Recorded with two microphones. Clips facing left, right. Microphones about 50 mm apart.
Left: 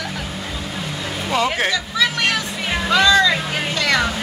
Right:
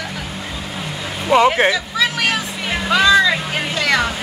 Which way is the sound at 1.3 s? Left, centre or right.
Right.